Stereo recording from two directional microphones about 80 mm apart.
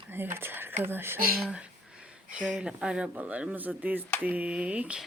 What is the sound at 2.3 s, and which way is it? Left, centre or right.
Speech, centre.